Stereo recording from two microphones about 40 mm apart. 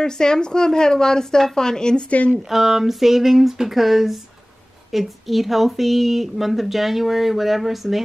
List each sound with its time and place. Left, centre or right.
0.0 s a woman's voice: centre
2.0 s speech: left
2.3 s speech: centre